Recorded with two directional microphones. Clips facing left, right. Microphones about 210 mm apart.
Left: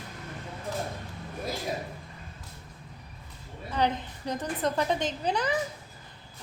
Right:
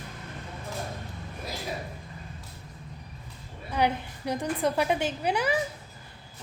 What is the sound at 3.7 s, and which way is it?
A woman's voice, 10° right (ahead or behind).